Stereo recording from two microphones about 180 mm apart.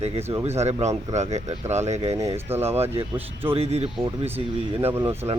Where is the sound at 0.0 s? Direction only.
35° right (ahead or behind).